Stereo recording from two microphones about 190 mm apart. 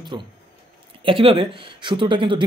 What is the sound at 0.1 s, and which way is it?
Speech, 20° right (ahead or behind).